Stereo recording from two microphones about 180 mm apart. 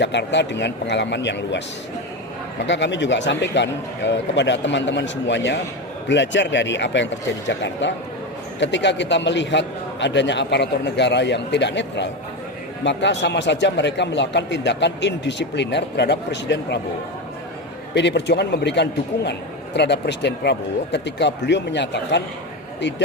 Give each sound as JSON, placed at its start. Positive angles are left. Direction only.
{"t": 0.0, "sound": "a man's voice", "side_deg": 75}
{"t": 2.6, "sound": "a man's voice", "side_deg": 80}
{"t": 17.9, "sound": "a man's voice", "side_deg": 75}